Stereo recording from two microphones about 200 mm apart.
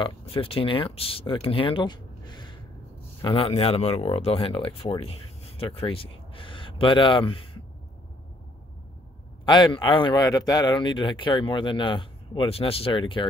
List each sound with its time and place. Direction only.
0.0 s speech: 25° left (ahead or behind)
9.5 s speech: 25° left (ahead or behind)